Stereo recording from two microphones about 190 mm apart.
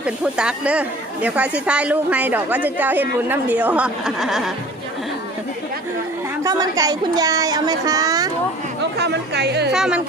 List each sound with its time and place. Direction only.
0.0 s a woman's voice: 5° right (ahead or behind)
6.4 s speech: 20° right (ahead or behind)
9.0 s speech: 60° right (ahead or behind)
9.7 s speech: 5° right (ahead or behind)